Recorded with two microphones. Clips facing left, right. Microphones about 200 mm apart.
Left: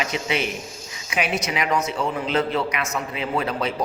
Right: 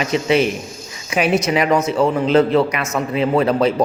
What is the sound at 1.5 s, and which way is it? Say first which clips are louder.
A man's voice: right 7 dB; 40° right (ahead or behind).